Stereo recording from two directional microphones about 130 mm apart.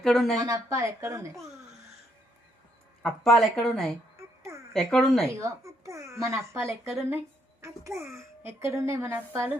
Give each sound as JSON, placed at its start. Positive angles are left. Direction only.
{"t": 0.0, "sound": "speech", "side_deg": 5}
{"t": 0.3, "sound": "a child's voice", "side_deg": -25}
{"t": 3.0, "sound": "speech", "side_deg": 0}
{"t": 5.4, "sound": "a child's voice", "side_deg": -20}